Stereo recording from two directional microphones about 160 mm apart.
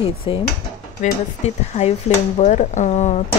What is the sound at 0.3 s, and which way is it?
Speech, 35° left (ahead or behind).